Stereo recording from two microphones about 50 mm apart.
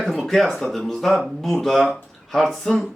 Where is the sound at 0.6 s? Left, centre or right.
Centre.